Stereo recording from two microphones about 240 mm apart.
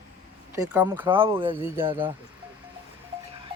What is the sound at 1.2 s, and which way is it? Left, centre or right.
Speech, right.